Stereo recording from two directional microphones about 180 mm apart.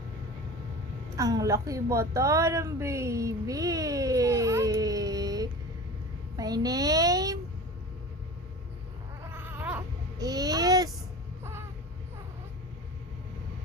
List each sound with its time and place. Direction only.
1.1 s speech: 20° right (ahead or behind)
9.3 s baby cry: 10° right (ahead or behind)
10.2 s babbling: 20° right (ahead or behind)